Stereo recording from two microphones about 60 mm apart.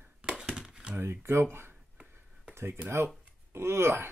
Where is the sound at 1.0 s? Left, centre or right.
Right.